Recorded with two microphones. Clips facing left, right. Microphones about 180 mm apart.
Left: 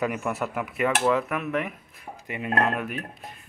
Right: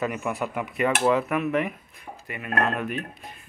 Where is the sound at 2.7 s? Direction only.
5° left (ahead or behind).